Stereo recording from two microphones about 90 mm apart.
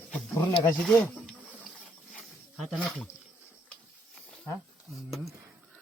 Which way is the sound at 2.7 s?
15° left (ahead or behind).